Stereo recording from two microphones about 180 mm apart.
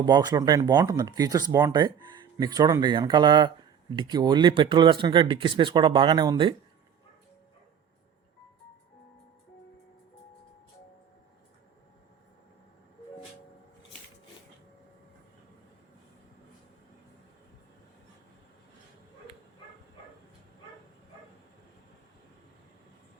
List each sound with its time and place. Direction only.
0.0 s speech: 20° right (ahead or behind)